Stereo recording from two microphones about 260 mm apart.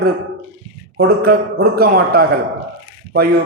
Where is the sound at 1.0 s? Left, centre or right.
Right.